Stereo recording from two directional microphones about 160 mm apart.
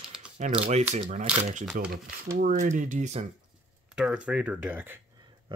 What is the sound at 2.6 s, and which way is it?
Speech, 50° right (ahead or behind).